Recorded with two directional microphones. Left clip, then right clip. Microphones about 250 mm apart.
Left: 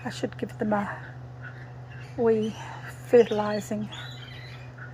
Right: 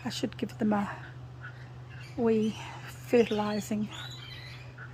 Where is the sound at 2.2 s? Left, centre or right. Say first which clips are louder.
Left 4 dB; centre.